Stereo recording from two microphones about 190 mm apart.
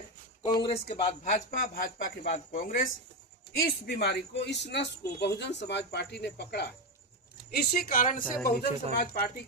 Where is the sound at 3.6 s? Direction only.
55° left (ahead or behind).